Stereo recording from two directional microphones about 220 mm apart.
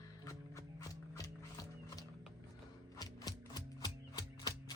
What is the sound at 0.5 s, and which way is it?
Music, 15° left (ahead or behind).